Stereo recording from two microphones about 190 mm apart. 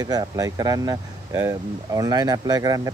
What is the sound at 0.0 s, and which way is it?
Speech, 20° right (ahead or behind).